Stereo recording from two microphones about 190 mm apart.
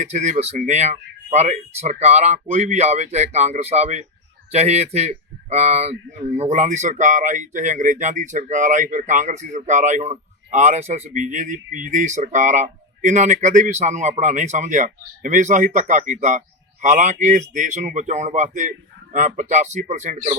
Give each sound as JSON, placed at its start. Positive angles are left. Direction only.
{"t": 0.0, "sound": "a man's voice", "side_deg": -35}